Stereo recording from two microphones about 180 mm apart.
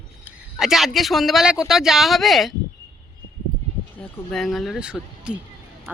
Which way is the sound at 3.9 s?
Centre (ahead or behind).